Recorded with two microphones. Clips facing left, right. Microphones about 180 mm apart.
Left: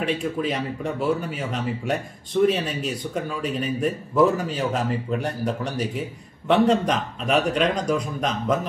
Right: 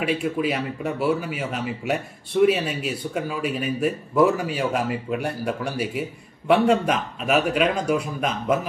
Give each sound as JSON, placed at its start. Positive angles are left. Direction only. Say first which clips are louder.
{"t": 0.0, "sound": "a man's voice", "louder": "right 1 dB", "side_deg": -10}